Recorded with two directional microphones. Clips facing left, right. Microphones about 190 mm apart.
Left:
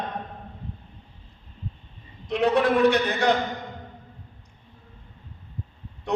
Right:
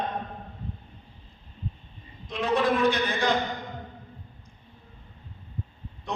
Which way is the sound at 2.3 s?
70° left (ahead or behind).